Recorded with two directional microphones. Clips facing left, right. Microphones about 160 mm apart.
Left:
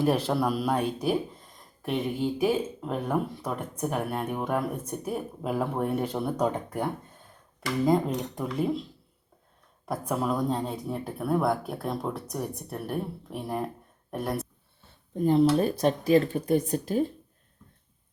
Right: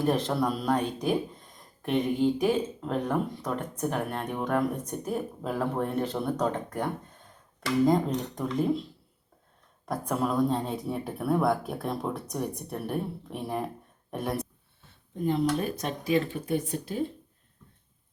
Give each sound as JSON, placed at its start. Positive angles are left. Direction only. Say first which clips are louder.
{"t": 0.0, "sound": "speech", "louder": "left 1 dB", "side_deg": 5}
{"t": 15.2, "sound": "speech", "louder": "left 5 dB", "side_deg": 35}